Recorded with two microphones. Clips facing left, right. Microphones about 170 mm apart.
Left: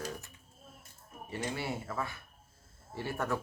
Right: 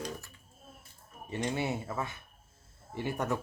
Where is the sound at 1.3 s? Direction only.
20° right (ahead or behind).